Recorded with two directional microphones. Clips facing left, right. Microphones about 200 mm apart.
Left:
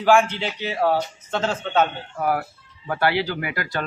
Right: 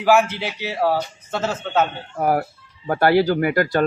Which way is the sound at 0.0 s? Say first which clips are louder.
Right 1 dB; 10° right (ahead or behind).